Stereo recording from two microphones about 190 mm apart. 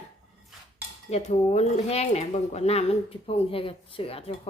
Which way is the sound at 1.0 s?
35° left (ahead or behind).